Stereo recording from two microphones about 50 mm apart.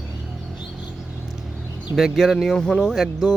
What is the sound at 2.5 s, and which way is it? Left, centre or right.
Speech, centre.